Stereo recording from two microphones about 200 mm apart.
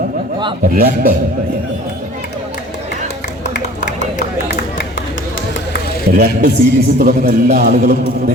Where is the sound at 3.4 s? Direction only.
55° left (ahead or behind).